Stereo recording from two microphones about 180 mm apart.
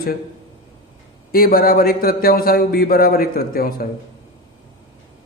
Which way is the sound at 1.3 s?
55° left (ahead or behind).